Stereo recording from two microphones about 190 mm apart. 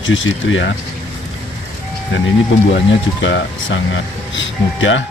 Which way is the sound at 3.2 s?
75° left (ahead or behind).